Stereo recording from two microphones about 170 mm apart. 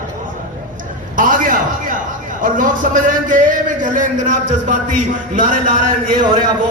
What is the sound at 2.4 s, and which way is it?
Speech, 55° right (ahead or behind).